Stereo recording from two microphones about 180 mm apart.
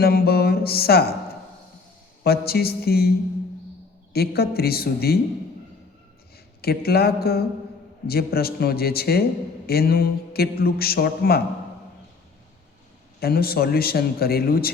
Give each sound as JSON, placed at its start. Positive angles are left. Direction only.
{"t": 0.0, "sound": "a sound", "side_deg": 60}
{"t": 2.2, "sound": "a man's voice", "side_deg": 60}
{"t": 4.1, "sound": "a man's voice", "side_deg": 60}
{"t": 6.6, "sound": "a man's voice", "side_deg": 60}
{"t": 13.1, "sound": "a man's voice", "side_deg": 55}